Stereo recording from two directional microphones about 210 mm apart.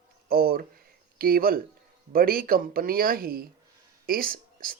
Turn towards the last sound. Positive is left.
turn(degrees=-45)  # may be behind; listen again after turning